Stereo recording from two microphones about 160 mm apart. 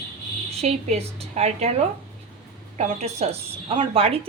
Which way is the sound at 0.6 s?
40° right (ahead or behind).